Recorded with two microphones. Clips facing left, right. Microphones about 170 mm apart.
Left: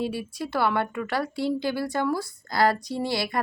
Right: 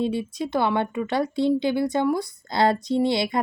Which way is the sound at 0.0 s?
20° right (ahead or behind).